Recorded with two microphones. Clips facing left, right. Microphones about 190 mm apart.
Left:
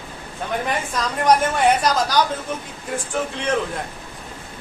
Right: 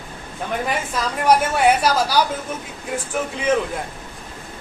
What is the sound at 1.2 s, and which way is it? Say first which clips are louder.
A man's voice: right 1 dB; 10° right (ahead or behind).